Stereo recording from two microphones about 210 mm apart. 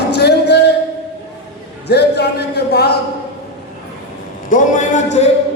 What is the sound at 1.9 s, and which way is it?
Speech, 50° left (ahead or behind).